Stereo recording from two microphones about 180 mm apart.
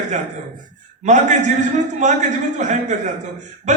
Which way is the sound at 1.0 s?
40° right (ahead or behind).